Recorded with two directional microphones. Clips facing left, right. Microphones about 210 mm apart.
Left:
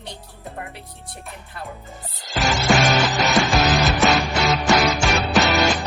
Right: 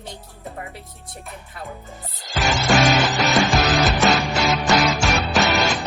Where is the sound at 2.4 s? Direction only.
Centre (ahead or behind).